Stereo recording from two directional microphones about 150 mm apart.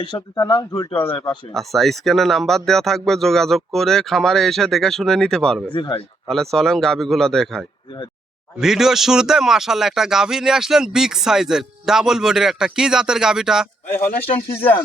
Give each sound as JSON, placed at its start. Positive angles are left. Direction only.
{"t": 0.0, "sound": "speech", "side_deg": 30}
{"t": 1.5, "sound": "speech", "side_deg": 0}
{"t": 14.4, "sound": "speech", "side_deg": 15}